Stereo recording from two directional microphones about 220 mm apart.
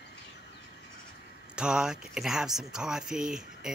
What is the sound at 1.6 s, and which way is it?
Speech, 5° right (ahead or behind).